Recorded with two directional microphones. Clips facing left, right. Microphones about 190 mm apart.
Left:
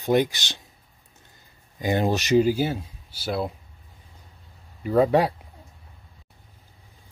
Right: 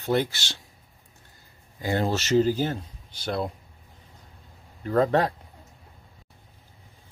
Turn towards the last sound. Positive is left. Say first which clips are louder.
# left 3 dB
turn(degrees=10)  # may be behind; listen again after turning